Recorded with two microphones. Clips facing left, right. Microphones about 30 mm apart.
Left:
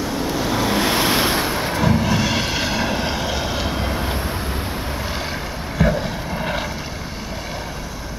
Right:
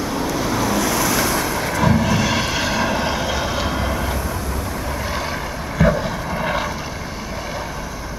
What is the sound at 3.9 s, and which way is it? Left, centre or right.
Train, left.